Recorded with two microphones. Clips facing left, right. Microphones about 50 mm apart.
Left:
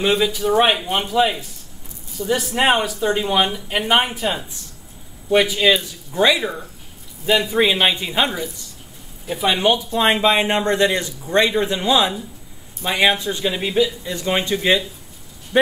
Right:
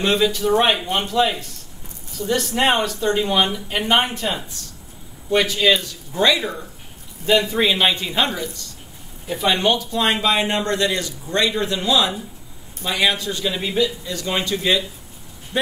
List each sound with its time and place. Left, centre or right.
0.0 s a man's voice: centre; by 15.7 s left